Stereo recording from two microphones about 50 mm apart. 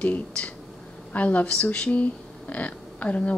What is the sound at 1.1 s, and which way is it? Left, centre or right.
Speech, left.